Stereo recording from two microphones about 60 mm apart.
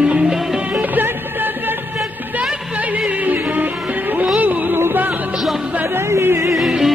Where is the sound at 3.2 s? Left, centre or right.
Right.